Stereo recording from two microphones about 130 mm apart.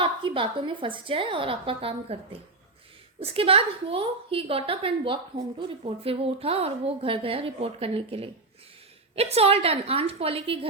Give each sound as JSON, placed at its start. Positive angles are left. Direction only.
{"t": 0.0, "sound": "a woman's voice", "side_deg": -40}
{"t": 3.2, "sound": "a woman's voice", "side_deg": -45}